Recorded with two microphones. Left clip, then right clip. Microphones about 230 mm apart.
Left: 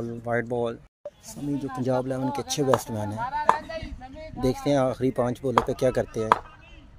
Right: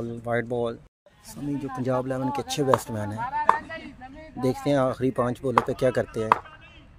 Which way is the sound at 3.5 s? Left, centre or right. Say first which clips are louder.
Even; left.